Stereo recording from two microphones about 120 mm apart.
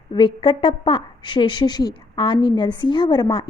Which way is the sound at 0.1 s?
40° left (ahead or behind).